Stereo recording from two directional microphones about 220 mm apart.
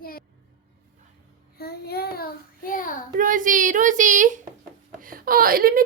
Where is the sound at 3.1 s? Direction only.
35° right (ahead or behind).